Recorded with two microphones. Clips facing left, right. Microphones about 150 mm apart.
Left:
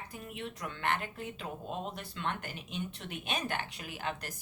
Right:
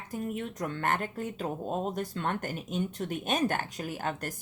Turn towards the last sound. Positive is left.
turn(degrees=-45)  # may be behind; listen again after turning